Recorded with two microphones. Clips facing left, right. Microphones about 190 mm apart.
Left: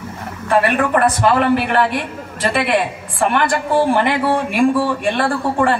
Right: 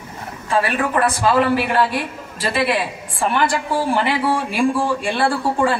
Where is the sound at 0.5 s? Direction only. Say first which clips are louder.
Left 4 dB; 60° left (ahead or behind).